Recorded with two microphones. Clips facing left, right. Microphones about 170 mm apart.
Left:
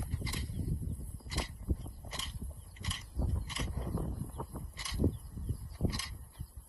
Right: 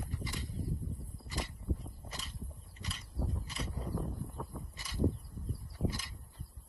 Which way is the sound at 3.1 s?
Centre (ahead or behind).